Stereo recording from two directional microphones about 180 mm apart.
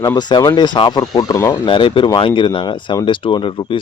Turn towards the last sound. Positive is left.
turn(degrees=30)  # may be behind; listen again after turning